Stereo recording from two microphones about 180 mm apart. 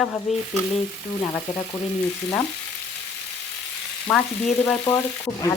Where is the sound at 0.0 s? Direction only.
Centre (ahead or behind).